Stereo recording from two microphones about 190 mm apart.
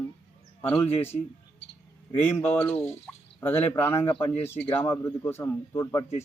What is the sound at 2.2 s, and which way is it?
Speech, 10° left (ahead or behind).